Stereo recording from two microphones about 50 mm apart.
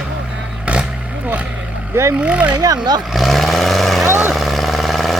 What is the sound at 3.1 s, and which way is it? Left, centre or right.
Vehicle, centre.